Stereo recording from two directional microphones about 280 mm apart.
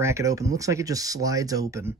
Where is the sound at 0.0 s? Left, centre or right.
Centre.